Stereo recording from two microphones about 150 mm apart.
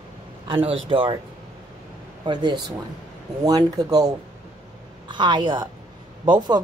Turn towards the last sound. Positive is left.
turn(degrees=-30)  # may be behind; listen again after turning